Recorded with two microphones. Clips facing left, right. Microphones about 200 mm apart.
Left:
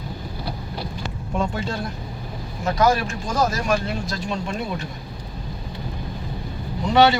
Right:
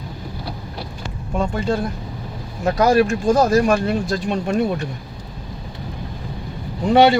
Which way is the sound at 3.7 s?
50° right (ahead or behind).